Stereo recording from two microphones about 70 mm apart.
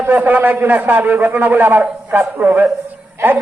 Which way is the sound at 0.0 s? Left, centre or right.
Right.